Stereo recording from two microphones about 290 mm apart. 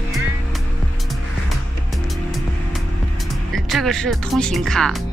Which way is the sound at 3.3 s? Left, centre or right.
Centre.